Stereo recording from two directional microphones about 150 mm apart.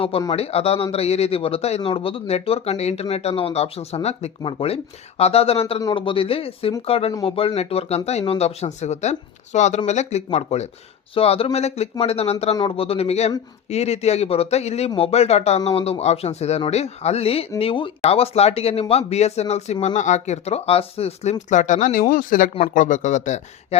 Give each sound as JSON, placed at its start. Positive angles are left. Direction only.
{"t": 0.3, "sound": "speech", "side_deg": 40}
{"t": 21.5, "sound": "speech", "side_deg": 55}